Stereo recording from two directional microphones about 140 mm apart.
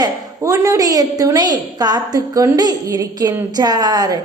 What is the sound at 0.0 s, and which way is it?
A woman's voice, 25° right (ahead or behind).